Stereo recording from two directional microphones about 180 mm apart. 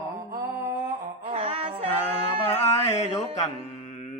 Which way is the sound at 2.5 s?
35° left (ahead or behind).